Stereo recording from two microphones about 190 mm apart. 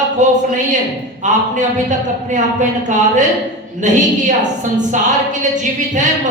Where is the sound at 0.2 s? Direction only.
40° right (ahead or behind).